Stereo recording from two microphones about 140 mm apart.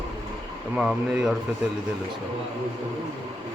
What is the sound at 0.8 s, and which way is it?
Speech, 5° right (ahead or behind).